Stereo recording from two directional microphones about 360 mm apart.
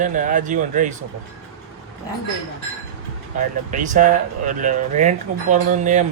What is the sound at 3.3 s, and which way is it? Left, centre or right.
Speech, right.